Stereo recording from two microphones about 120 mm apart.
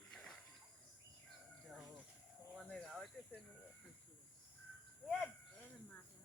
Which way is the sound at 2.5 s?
Centre (ahead or behind).